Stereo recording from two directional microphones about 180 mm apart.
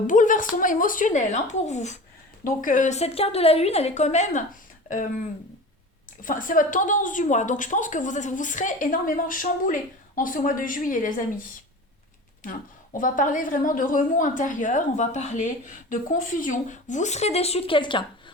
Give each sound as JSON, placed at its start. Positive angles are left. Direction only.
{"t": 0.1, "sound": "a woman's voice", "side_deg": 45}
{"t": 6.2, "sound": "a woman's voice", "side_deg": 45}
{"t": 12.9, "sound": "a woman's voice", "side_deg": 50}